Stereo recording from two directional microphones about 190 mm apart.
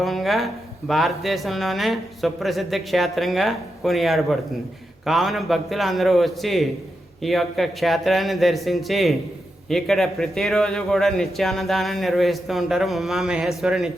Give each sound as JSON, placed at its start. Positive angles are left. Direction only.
{"t": 0.0, "sound": "speech", "side_deg": 0}